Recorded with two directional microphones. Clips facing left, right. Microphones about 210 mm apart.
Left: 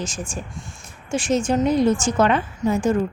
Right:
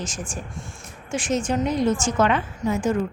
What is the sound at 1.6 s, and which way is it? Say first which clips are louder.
A woman's voice: left 4 dB; 35° left (ahead or behind).